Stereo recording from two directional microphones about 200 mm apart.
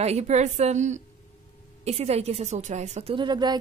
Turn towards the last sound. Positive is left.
turn(degrees=-20)  # may be behind; listen again after turning